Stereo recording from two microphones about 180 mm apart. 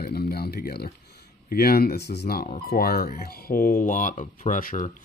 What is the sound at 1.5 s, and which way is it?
Speech, 55° left (ahead or behind).